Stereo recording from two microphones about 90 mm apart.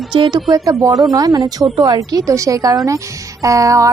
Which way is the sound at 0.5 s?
40° right (ahead or behind).